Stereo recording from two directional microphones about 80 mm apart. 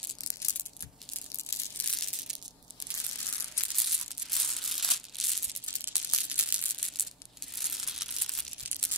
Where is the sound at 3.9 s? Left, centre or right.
Centre.